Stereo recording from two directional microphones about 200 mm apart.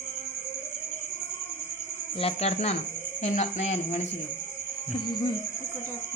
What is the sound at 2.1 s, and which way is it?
Speech, 30° left (ahead or behind).